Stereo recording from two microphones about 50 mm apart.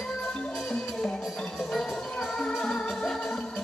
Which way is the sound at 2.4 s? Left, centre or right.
Centre.